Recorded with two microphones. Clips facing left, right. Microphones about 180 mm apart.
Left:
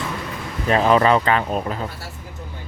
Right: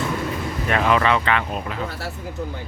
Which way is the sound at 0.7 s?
35° left (ahead or behind).